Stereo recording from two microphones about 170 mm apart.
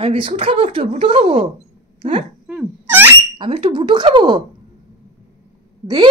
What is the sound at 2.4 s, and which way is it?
Dog, 5° right (ahead or behind).